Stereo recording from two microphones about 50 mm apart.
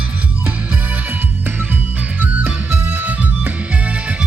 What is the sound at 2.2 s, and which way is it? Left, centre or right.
Music, right.